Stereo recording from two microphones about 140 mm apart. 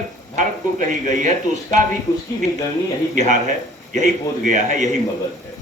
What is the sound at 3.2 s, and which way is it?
A man's voice, 60° right (ahead or behind).